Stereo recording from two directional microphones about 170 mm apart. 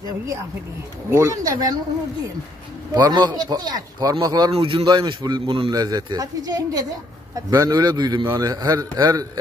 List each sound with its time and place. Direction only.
1.1 s speech: 20° right (ahead or behind)
2.9 s speech: 25° right (ahead or behind)